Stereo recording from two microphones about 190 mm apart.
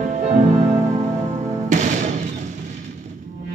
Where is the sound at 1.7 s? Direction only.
40° right (ahead or behind).